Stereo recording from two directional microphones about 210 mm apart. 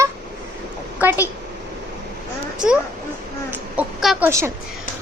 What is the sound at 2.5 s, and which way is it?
A woman's voice, 5° right (ahead or behind).